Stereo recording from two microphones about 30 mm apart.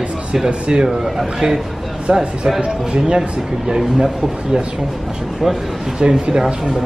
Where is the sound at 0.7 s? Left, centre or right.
Right.